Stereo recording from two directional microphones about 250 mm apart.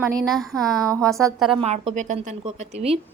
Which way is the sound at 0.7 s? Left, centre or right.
Centre.